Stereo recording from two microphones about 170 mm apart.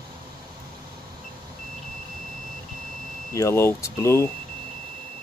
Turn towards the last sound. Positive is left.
turn(degrees=15)  # may be behind; listen again after turning